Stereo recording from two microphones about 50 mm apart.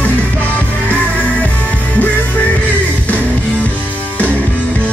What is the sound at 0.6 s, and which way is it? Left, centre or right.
Music, left.